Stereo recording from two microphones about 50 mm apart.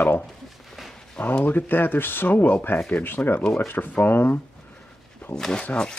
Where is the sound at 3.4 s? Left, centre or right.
Centre.